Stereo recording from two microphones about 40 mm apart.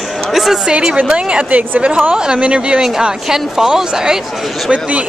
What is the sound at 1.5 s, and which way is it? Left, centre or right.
Speech, right.